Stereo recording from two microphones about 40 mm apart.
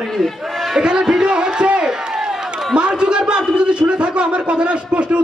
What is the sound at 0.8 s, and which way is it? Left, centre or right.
A man's voice, right.